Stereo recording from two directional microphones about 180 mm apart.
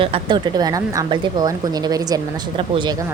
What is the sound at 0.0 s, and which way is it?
A woman's voice, 25° right (ahead or behind).